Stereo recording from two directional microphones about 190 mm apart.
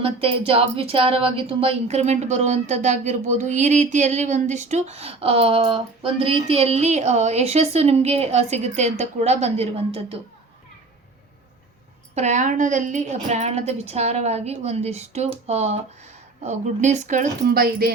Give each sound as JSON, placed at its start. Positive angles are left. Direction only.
{"t": 0.0, "sound": "a woman's voice", "side_deg": -30}
{"t": 12.1, "sound": "a woman's voice", "side_deg": -40}
{"t": 17.7, "sound": "speech", "side_deg": -55}